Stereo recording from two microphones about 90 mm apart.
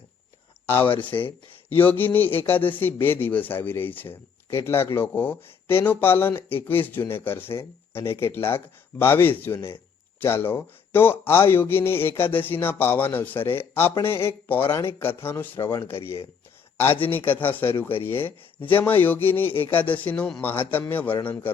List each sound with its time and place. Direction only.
1.7 s speech: 20° left (ahead or behind)
17.0 s speech: 20° left (ahead or behind)